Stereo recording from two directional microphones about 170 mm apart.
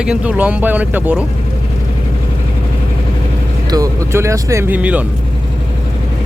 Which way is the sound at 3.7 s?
20° right (ahead or behind).